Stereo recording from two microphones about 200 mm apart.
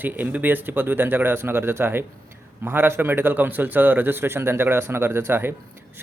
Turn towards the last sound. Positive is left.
turn(degrees=-10)  # may be behind; listen again after turning